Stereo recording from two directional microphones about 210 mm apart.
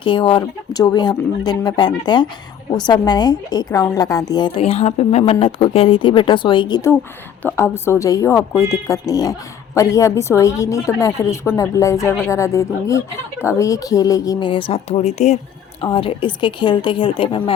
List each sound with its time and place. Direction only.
0.0 s a woman's voice: 25° left (ahead or behind)